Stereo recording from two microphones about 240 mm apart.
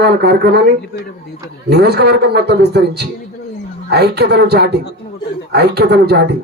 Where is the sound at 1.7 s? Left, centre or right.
Right.